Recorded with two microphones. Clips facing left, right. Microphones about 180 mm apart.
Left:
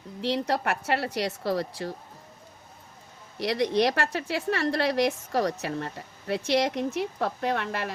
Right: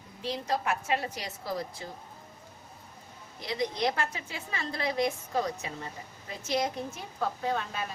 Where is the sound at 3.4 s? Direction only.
75° left (ahead or behind).